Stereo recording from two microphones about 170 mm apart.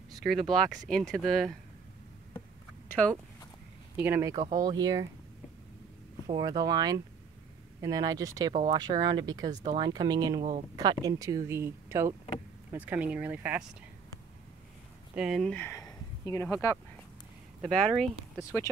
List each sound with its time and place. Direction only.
0.2 s speech: centre (ahead or behind)
3.9 s speech: 10° right (ahead or behind)
6.2 s speech: 25° right (ahead or behind)
15.1 s speech: 5° right (ahead or behind)
15.5 s a sound: 15° left (ahead or behind)
17.6 s speech: centre (ahead or behind)